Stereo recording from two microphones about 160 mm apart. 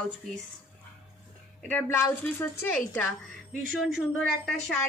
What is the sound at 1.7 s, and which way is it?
Speech, 15° left (ahead or behind).